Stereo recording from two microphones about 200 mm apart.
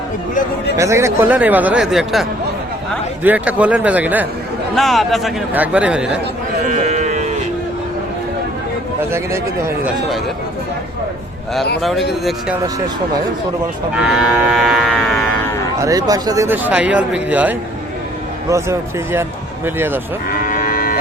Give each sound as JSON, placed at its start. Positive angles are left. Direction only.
{"t": 0.8, "sound": "speech", "side_deg": -15}
{"t": 3.2, "sound": "speech", "side_deg": -5}
{"t": 6.7, "sound": "livestock", "side_deg": -35}
{"t": 9.0, "sound": "speech", "side_deg": -15}
{"t": 11.8, "sound": "speech", "side_deg": 0}
{"t": 13.9, "sound": "speech", "side_deg": -5}
{"t": 15.8, "sound": "speech", "side_deg": -20}
{"t": 20.5, "sound": "cattle", "side_deg": 45}